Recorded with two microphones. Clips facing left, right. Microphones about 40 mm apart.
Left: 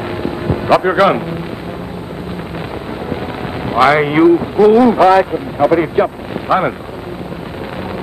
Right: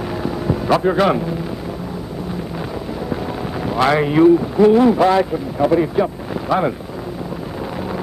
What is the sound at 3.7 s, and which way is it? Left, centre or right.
Speech, left.